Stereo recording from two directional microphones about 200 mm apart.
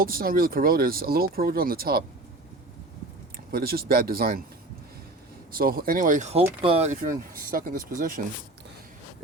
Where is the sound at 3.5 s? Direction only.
50° right (ahead or behind).